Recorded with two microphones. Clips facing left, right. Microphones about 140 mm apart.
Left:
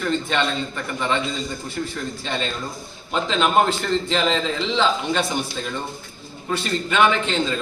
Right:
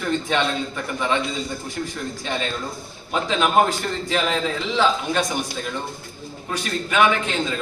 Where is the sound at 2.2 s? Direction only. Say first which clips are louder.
Right 1 dB; 10° right (ahead or behind).